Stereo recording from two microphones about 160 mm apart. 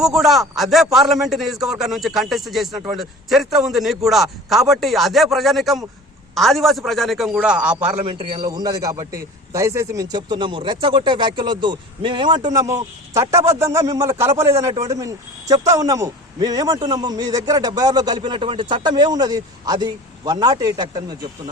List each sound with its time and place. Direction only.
0.0 s speech: centre (ahead or behind)
7.9 s a man's voice: 35° right (ahead or behind)
8.5 s speech: 20° right (ahead or behind)